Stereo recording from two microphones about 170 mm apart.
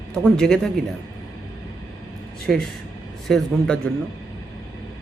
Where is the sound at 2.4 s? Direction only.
Centre (ahead or behind).